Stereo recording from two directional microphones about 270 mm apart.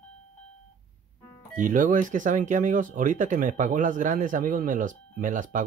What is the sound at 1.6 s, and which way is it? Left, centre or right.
Speech, right.